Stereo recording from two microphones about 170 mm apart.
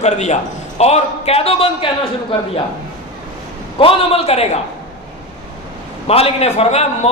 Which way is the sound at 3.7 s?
35° left (ahead or behind).